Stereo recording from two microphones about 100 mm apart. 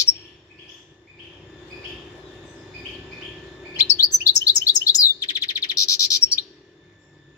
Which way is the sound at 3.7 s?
35° left (ahead or behind).